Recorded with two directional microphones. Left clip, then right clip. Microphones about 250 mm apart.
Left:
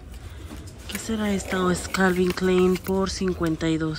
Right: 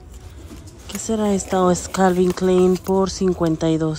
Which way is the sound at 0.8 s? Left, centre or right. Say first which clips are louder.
Right 7 dB; centre.